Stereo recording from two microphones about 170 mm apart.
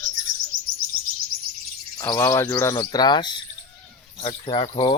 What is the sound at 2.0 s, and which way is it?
Speech, 15° left (ahead or behind).